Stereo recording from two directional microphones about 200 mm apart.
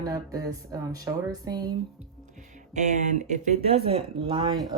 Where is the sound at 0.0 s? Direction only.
15° right (ahead or behind).